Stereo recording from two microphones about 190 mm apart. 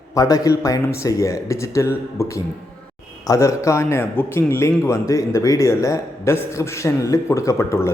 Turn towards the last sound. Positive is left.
turn(degrees=15)  # may be behind; listen again after turning